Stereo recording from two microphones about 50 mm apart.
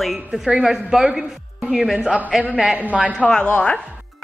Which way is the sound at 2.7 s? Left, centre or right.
Right.